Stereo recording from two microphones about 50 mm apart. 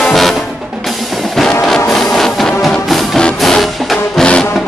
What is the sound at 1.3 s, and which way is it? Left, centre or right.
Music, centre.